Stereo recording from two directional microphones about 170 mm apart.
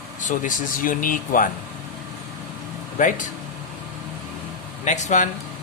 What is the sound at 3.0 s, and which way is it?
Speech, 50° left (ahead or behind).